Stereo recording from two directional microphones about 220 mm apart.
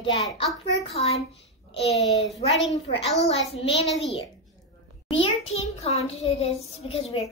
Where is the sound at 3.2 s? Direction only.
25° left (ahead or behind).